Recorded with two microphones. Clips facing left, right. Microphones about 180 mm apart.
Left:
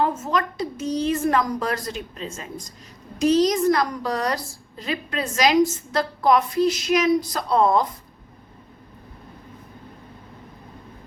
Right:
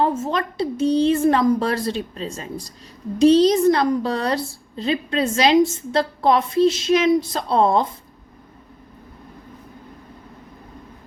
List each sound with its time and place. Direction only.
0.2 s a woman's voice: 30° right (ahead or behind)